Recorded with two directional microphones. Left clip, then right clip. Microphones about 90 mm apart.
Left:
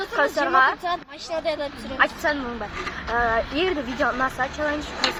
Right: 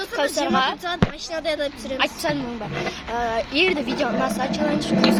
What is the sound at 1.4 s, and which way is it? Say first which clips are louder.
Speech: right 3 dB; 55° right (ahead or behind).